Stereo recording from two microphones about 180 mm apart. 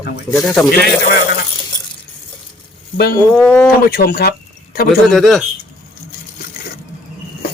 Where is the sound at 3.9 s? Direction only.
60° left (ahead or behind).